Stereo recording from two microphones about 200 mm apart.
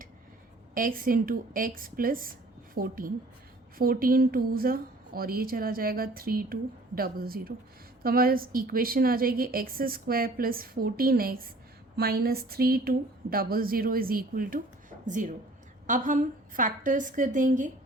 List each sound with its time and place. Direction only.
0.7 s a woman's voice: 45° right (ahead or behind)